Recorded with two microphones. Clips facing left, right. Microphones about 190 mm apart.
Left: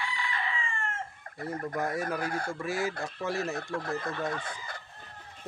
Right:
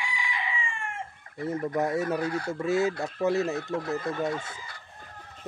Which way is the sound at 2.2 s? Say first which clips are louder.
Right 3 dB; 50° left (ahead or behind).